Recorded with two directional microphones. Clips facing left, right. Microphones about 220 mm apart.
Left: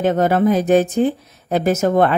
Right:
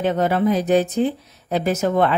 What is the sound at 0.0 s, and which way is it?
Speech, 45° left (ahead or behind).